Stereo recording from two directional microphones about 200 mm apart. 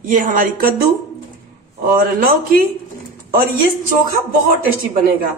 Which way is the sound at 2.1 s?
45° right (ahead or behind).